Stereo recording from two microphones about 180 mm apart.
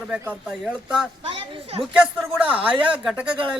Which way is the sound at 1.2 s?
30° right (ahead or behind).